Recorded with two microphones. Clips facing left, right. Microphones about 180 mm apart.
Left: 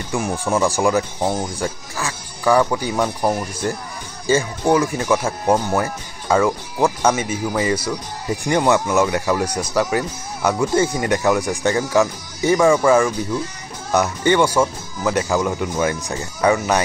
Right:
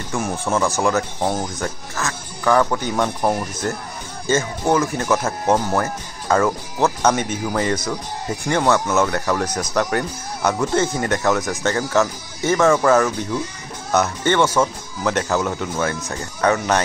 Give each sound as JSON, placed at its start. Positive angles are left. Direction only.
{"t": 0.1, "sound": "speech", "side_deg": 15}